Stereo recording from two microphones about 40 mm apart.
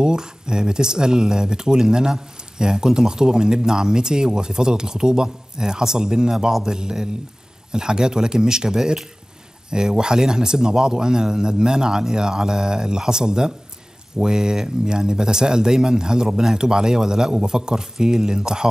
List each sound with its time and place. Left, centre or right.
0.0 s speech: centre